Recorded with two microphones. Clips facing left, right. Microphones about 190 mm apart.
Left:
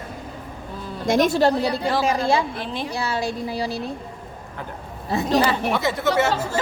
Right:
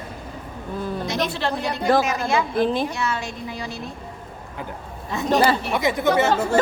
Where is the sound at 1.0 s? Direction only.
50° left (ahead or behind).